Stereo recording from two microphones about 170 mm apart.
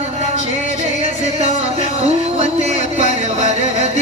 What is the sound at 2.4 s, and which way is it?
Music, 45° left (ahead or behind).